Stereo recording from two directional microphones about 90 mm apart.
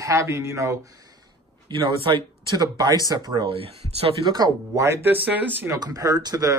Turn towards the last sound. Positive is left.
turn(degrees=-45)  # may be behind; listen again after turning